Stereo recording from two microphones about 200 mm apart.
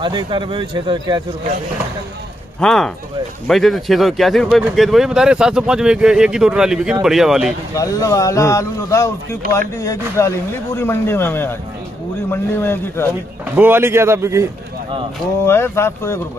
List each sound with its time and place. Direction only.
0.0 s speech: 25° right (ahead or behind)
2.6 s a man's voice: centre (ahead or behind)
7.7 s speech: 15° left (ahead or behind)
13.6 s a man's voice: 10° right (ahead or behind)
15.4 s speech: 10° left (ahead or behind)